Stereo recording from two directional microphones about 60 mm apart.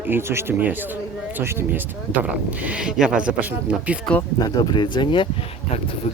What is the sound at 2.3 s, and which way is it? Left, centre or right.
Speech, centre.